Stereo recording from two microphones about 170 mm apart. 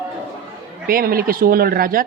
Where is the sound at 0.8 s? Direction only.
60° right (ahead or behind).